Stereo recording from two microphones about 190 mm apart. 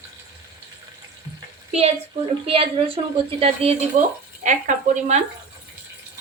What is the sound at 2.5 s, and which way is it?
A woman's voice, 30° right (ahead or behind).